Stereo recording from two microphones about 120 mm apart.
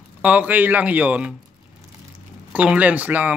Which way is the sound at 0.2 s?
10° right (ahead or behind).